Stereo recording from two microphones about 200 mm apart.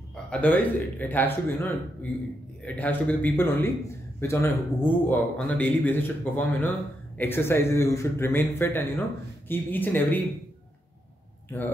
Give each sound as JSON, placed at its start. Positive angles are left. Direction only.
{"t": 0.1, "sound": "speech", "side_deg": 5}